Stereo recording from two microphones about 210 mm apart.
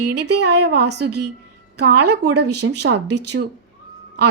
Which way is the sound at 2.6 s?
70° right (ahead or behind).